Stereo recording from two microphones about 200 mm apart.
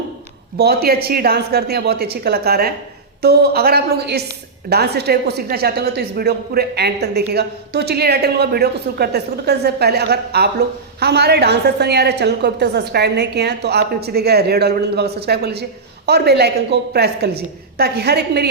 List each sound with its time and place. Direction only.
0.5 s a woman's voice: 50° right (ahead or behind)